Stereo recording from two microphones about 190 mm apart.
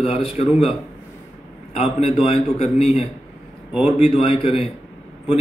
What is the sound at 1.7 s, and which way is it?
A man's voice, 35° left (ahead or behind).